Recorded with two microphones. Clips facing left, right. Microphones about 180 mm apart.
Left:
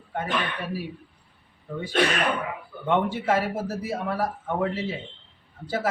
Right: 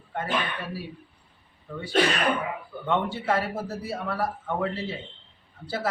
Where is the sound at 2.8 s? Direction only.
15° left (ahead or behind).